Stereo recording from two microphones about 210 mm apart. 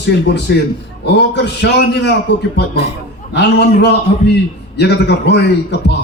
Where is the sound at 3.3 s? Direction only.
55° left (ahead or behind).